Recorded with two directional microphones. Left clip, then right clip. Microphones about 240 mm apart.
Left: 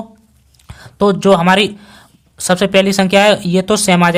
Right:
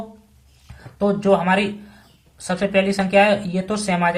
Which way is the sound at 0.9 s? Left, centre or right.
Left.